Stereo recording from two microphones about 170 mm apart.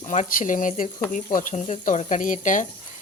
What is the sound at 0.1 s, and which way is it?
Speech, 50° left (ahead or behind).